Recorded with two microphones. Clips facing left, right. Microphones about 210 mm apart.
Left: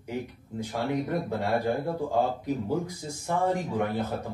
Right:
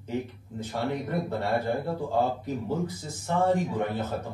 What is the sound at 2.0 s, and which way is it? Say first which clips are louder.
Speech: left 1 dB; 15° left (ahead or behind).